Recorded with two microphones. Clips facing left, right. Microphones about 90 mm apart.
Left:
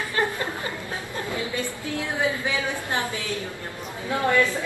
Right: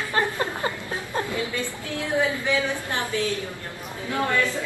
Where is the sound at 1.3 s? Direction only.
20° left (ahead or behind).